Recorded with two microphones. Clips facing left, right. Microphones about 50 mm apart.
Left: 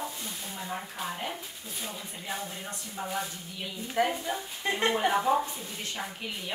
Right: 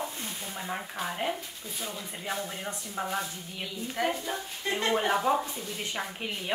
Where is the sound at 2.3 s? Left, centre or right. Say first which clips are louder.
Right 3 dB; right.